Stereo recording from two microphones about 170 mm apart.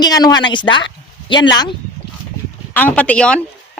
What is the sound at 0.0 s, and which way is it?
Speech, 25° left (ahead or behind).